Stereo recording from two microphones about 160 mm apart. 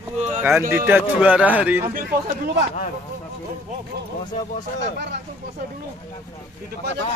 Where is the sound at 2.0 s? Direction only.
65° right (ahead or behind).